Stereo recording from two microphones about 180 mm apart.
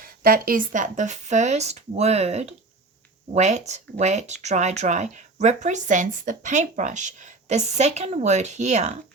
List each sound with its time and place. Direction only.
0.0 s speech: 55° right (ahead or behind)